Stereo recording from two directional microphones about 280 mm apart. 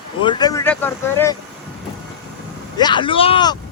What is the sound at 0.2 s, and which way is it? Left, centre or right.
Speech, centre.